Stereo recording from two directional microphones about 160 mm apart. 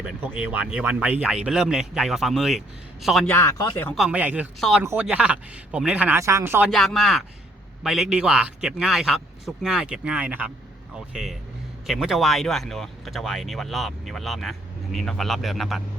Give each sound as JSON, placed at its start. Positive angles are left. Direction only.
{"t": 0.5, "sound": "speech", "side_deg": -10}
{"t": 3.2, "sound": "speech", "side_deg": 15}
{"t": 3.9, "sound": "speech", "side_deg": -5}
{"t": 4.8, "sound": "speech", "side_deg": -15}
{"t": 6.7, "sound": "speech", "side_deg": 0}